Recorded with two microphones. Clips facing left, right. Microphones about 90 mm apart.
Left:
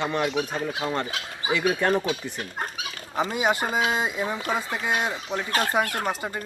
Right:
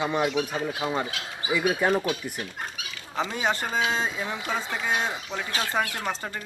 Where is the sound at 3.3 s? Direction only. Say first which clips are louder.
Left 3 dB; 10° left (ahead or behind).